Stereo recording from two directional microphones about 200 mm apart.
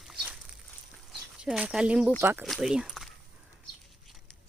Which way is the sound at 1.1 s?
5° right (ahead or behind).